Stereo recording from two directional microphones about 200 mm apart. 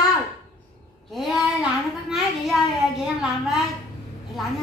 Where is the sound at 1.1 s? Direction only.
Centre (ahead or behind).